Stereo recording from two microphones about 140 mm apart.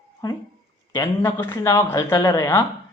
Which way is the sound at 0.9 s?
25° left (ahead or behind).